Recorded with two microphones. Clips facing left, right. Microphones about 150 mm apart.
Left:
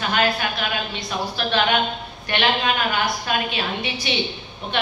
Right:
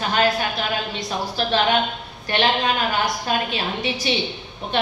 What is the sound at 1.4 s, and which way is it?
A woman's voice, 35° right (ahead or behind).